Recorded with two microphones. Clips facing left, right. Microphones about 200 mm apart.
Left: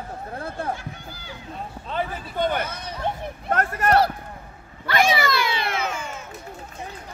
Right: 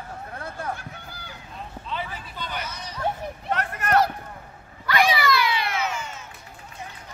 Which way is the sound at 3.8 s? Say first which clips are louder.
Left 2 dB; 35° left (ahead or behind).